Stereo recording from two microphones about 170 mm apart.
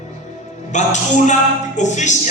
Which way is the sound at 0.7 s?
45° left (ahead or behind).